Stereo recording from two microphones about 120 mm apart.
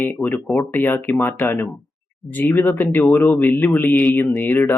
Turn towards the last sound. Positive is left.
turn(degrees=15)  # may be behind; listen again after turning